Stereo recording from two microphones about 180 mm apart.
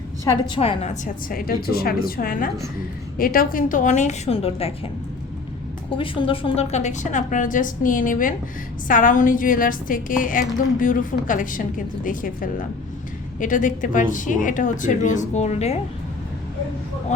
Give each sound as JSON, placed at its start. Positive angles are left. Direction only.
{"t": 0.3, "sound": "speech", "side_deg": 25}
{"t": 6.0, "sound": "speech", "side_deg": 30}